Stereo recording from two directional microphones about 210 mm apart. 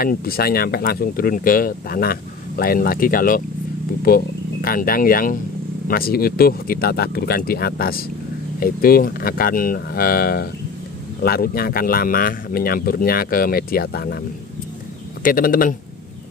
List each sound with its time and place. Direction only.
0.0 s speech: 45° left (ahead or behind)
15.2 s speech: 40° left (ahead or behind)